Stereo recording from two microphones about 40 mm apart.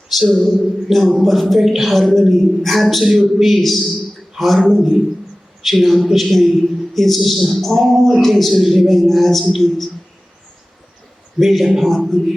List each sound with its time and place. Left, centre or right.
0.1 s a man's voice: centre
11.3 s a man's voice: centre